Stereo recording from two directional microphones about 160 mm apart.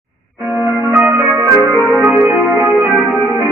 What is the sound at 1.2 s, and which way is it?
Music, 20° right (ahead or behind).